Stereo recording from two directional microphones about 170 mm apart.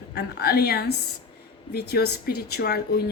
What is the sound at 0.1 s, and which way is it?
A woman's voice, 70° left (ahead or behind).